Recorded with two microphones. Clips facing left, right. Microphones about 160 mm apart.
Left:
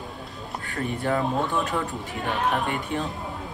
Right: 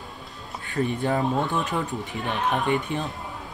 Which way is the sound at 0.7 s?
20° right (ahead or behind).